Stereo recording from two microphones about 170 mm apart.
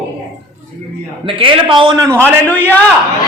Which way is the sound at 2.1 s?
15° right (ahead or behind).